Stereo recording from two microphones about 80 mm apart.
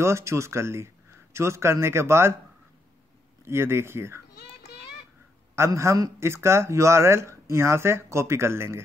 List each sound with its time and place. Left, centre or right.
0.0 s speech: right
3.4 s speech: right
5.7 s a man's voice: right